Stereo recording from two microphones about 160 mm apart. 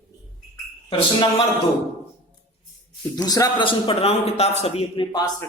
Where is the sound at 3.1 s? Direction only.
25° left (ahead or behind); by 5.0 s 40° left (ahead or behind).